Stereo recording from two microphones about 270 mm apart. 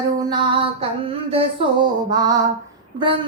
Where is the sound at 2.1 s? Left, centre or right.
Centre.